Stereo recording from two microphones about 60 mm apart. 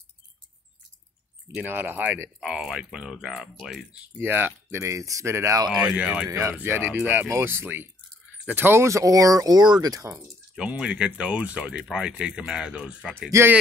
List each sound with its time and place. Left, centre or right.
1.7 s speech: right
2.4 s speech: centre
4.2 s speech: right
4.9 s speech: right
5.7 s speech: centre
6.2 s speech: right
6.6 s speech: right
7.2 s speech: right
8.8 s speech: right
10.8 s speech: centre
13.3 s speech: right